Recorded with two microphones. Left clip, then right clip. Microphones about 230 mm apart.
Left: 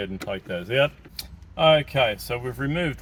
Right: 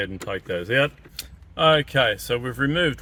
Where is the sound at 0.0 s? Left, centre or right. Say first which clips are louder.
Right 2 dB; right.